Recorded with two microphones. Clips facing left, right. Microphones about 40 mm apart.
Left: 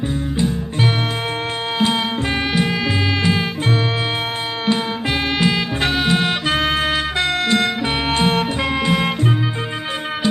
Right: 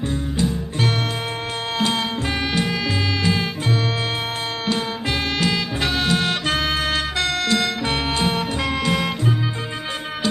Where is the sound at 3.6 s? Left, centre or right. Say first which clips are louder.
Left 3 dB; left.